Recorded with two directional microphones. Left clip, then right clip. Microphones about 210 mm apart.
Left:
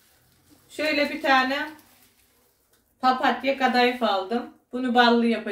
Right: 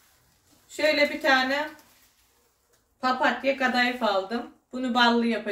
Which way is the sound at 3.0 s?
Centre (ahead or behind).